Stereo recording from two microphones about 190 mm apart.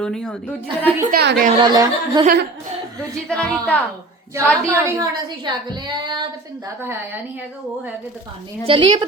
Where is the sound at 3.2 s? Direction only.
5° left (ahead or behind).